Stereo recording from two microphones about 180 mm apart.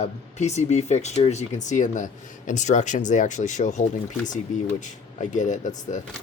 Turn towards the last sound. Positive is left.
turn(degrees=45)  # may be behind; listen again after turning